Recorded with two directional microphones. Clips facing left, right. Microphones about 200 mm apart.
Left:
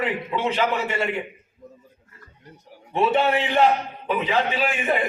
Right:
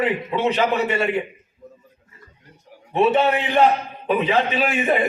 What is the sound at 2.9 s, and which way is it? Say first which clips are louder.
A man's voice: right 3 dB; 20° right (ahead or behind).